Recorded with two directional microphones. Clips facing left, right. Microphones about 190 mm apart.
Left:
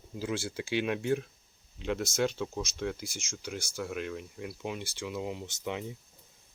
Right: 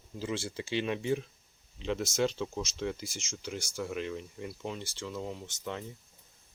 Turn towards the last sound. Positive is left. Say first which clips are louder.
# left 3 dB
turn(degrees=15)  # may be behind; listen again after turning